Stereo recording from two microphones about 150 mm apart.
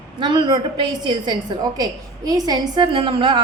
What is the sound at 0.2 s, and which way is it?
A woman's voice, 30° right (ahead or behind).